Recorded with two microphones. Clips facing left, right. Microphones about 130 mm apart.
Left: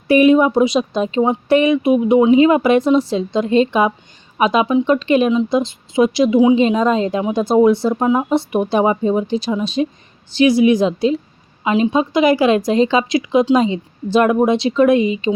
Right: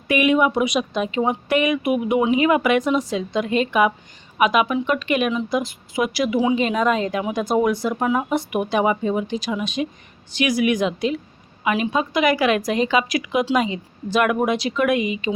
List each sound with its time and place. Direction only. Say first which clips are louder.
0.1 s speech: left 7 dB; 35° left (ahead or behind)